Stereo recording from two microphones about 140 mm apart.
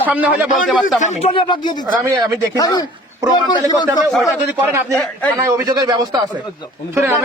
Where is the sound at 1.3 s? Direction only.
35° left (ahead or behind).